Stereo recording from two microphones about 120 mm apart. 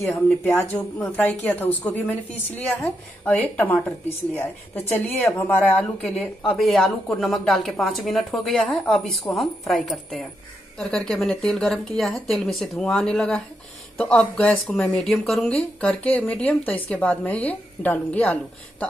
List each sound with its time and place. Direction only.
0.6 s speech: 15° left (ahead or behind)
5.8 s speech: 5° left (ahead or behind)